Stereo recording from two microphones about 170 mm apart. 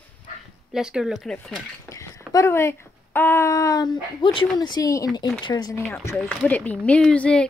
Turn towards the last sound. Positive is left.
turn(degrees=5)  # may be behind; listen again after turning